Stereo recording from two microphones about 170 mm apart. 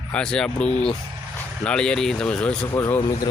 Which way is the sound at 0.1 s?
5° left (ahead or behind).